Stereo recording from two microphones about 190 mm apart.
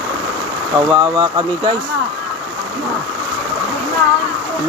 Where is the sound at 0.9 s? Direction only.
20° right (ahead or behind).